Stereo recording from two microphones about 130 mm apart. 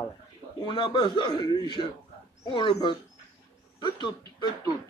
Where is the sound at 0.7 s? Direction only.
40° left (ahead or behind).